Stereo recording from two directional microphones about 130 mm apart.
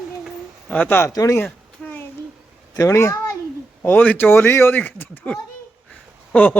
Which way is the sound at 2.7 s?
20° left (ahead or behind).